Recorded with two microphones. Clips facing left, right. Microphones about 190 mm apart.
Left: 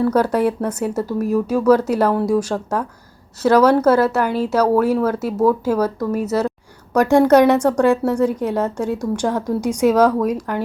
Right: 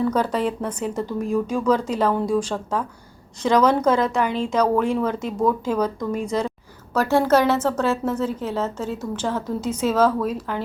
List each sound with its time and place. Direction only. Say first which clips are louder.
0.0 s a woman's voice: left 5 dB; 10° left (ahead or behind)